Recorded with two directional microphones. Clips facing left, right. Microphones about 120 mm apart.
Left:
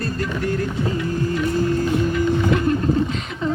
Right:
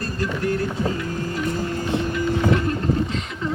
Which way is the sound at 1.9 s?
25° right (ahead or behind).